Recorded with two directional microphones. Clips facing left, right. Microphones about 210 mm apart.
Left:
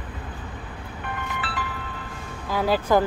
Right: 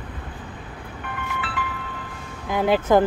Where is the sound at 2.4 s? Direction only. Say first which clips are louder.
Right 3 dB; 20° right (ahead or behind).